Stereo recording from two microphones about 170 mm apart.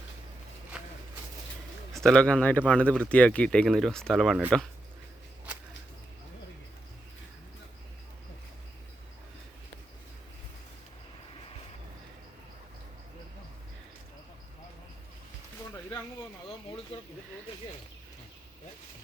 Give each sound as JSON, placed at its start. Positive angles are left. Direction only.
{"t": 0.7, "sound": "a sound", "side_deg": -5}
{"t": 2.0, "sound": "speech", "side_deg": 5}
{"t": 16.9, "sound": "snake", "side_deg": 35}